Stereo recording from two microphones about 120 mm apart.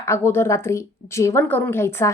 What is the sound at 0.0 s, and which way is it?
Speech, 20° left (ahead or behind).